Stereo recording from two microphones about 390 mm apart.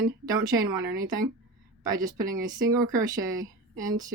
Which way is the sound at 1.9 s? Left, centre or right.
Centre.